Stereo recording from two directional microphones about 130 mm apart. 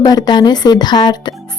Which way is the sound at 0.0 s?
30° left (ahead or behind).